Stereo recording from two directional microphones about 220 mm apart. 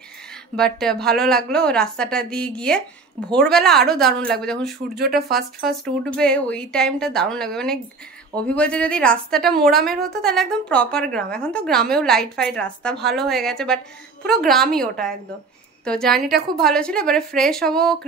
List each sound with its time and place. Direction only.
0.6 s a woman's voice: centre (ahead or behind)
4.9 s speech: 45° right (ahead or behind)
5.3 s a woman's voice: centre (ahead or behind)